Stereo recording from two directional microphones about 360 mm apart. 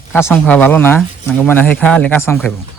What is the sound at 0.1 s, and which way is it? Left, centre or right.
Speech, centre.